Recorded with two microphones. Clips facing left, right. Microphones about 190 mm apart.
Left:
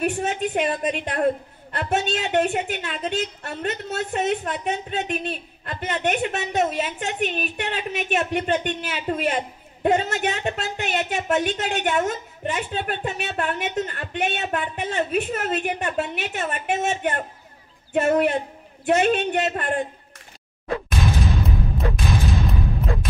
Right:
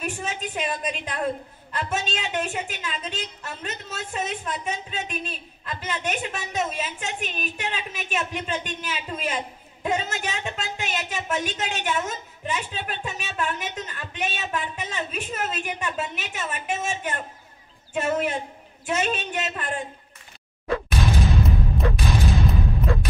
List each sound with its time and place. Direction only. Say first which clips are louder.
0.0 s a woman's voice: left 7 dB; 60° left (ahead or behind)
21.0 s music: even; centre (ahead or behind)